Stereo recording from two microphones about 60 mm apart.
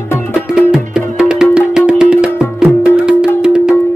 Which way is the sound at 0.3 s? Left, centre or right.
Centre.